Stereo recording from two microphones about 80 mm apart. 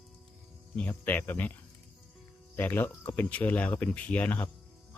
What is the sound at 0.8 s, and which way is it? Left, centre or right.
Speech, left.